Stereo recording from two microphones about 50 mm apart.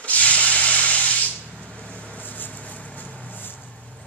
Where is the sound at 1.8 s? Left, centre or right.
Left.